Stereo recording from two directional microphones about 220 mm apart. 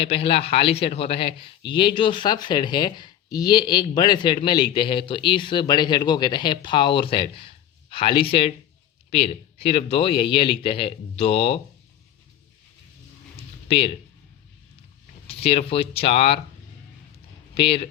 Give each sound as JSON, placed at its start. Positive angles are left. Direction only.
{"t": 0.0, "sound": "speech", "side_deg": 25}
{"t": 13.7, "sound": "speech", "side_deg": 25}
{"t": 15.3, "sound": "speech", "side_deg": 25}
{"t": 17.5, "sound": "speech", "side_deg": 25}